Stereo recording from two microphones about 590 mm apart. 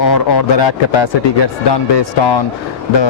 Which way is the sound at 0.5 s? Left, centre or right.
Left.